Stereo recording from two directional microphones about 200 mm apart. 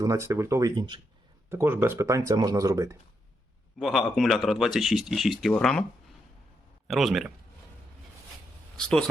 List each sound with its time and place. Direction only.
0.0 s speech: 15° right (ahead or behind)
1.5 s speech: 10° right (ahead or behind)
3.8 s speech: centre (ahead or behind)
6.8 s speech: centre (ahead or behind)
8.8 s speech: 5° left (ahead or behind)